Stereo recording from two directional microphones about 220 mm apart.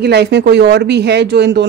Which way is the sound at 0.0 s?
50° right (ahead or behind).